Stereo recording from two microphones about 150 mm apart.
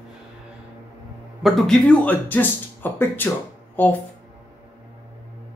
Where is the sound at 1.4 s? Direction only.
Centre (ahead or behind).